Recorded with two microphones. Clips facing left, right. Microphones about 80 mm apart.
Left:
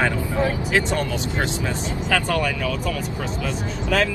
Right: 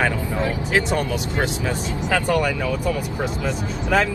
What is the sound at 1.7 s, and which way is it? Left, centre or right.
Speech, left.